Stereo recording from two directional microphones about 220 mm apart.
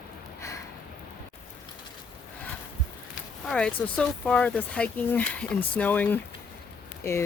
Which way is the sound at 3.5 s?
5° left (ahead or behind).